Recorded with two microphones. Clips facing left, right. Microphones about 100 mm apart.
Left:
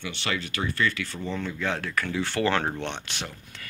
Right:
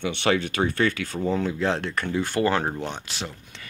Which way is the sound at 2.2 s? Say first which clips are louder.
Right 3 dB; 15° right (ahead or behind).